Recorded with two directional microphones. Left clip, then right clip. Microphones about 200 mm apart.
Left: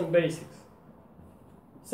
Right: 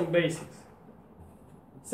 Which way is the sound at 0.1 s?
10° right (ahead or behind).